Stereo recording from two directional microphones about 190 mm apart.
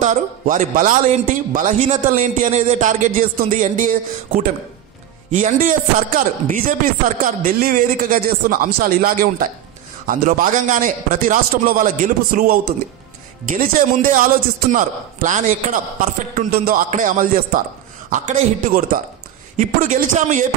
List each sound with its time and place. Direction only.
0.0 s a man's voice: 40° right (ahead or behind)
16.3 s a man's voice: 50° right (ahead or behind)